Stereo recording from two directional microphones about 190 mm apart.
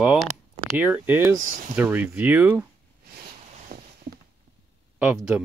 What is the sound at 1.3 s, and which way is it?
Speech, 45° right (ahead or behind).